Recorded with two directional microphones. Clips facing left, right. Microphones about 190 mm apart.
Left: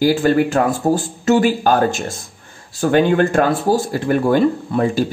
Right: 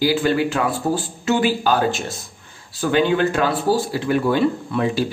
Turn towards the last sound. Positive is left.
turn(degrees=45)  # may be behind; listen again after turning